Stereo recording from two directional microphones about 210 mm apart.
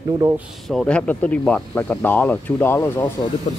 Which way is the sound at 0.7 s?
5° left (ahead or behind).